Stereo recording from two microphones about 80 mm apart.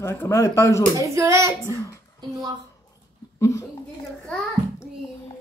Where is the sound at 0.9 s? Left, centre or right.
Right.